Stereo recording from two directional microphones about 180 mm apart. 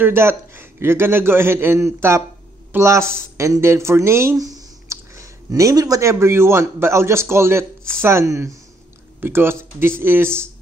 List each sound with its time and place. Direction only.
0.0 s a man's voice: 15° right (ahead or behind)